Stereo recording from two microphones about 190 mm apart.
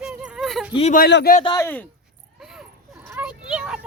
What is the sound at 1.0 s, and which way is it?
Speech, 60° left (ahead or behind).